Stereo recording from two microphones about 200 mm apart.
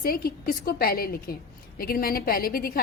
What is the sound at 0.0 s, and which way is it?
A woman's voice, 50° left (ahead or behind).